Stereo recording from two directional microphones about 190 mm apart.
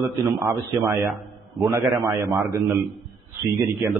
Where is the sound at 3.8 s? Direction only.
10° right (ahead or behind).